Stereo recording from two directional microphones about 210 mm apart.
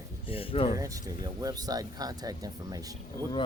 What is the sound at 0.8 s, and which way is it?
Speech, 15° right (ahead or behind).